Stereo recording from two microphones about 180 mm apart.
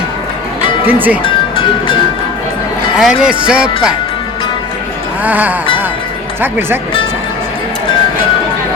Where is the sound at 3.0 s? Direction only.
5° right (ahead or behind).